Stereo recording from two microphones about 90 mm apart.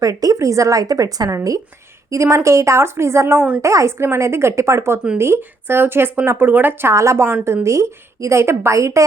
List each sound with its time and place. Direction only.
0.0 s a woman's voice: 40° right (ahead or behind); by 6.9 s 20° right (ahead or behind)
6.9 s a woman's voice: 35° right (ahead or behind)